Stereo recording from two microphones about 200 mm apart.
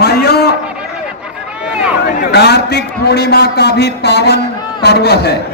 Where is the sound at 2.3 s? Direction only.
55° left (ahead or behind).